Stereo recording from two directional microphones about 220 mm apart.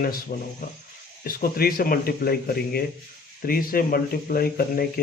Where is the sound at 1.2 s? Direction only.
40° left (ahead or behind).